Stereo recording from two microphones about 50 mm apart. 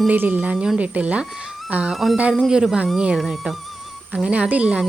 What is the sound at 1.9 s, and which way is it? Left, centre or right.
Speech, centre.